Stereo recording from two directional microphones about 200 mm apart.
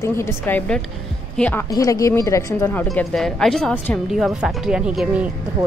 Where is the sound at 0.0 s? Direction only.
15° left (ahead or behind).